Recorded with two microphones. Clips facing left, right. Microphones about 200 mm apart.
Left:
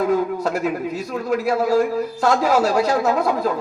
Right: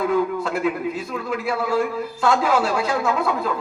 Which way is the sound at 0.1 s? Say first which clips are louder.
Left 1 dB; 40° left (ahead or behind).